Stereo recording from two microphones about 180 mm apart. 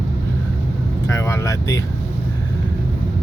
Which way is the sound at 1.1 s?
15° left (ahead or behind).